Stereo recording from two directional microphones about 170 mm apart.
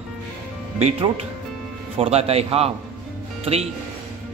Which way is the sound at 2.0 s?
35° right (ahead or behind).